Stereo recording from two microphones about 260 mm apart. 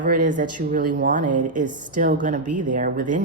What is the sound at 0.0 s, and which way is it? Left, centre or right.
A woman's voice, right.